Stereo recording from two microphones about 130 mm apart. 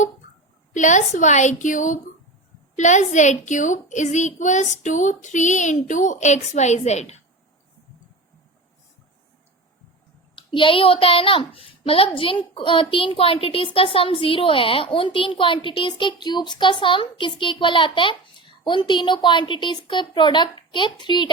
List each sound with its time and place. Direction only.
0.7 s a child's voice: 70° left (ahead or behind)
2.7 s a child's voice: 70° left (ahead or behind)
10.3 s speech: 40° left (ahead or behind)